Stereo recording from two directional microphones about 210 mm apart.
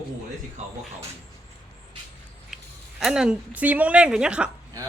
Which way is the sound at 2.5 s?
Centre (ahead or behind).